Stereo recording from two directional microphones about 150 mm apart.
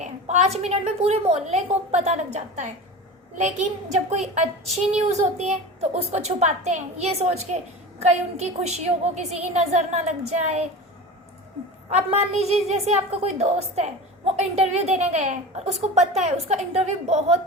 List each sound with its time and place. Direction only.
0.0 s a woman's voice: 50° right (ahead or behind)
11.9 s a woman's voice: 45° right (ahead or behind)